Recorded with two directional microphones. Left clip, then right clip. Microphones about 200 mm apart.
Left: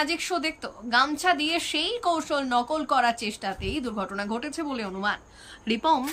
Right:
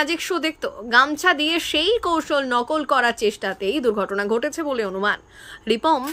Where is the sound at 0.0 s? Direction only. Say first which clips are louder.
Right 4 dB; 15° right (ahead or behind).